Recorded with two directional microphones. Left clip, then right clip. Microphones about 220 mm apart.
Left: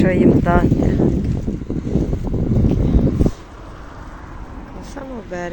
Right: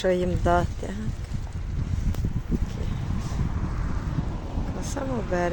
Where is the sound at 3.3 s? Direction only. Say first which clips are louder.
Left 2 dB; 50° left (ahead or behind).